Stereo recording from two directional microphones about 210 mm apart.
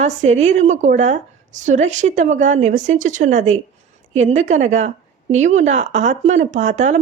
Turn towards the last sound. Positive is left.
turn(degrees=-35)  # may be behind; listen again after turning